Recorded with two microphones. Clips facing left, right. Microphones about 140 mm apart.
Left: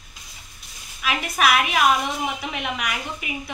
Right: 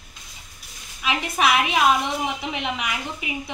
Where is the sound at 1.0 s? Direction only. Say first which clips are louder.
Even; 20° right (ahead or behind).